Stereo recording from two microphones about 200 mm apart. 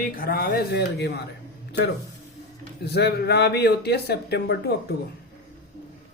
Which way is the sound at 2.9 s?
55° left (ahead or behind).